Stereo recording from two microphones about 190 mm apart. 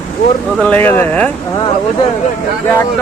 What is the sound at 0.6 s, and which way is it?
Speech, 10° left (ahead or behind).